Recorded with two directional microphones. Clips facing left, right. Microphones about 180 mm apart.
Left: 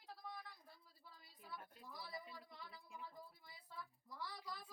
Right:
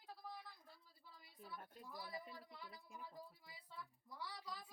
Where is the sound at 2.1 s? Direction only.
40° right (ahead or behind).